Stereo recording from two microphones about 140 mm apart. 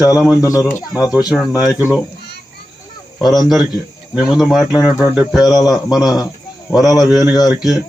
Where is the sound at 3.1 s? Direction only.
Centre (ahead or behind).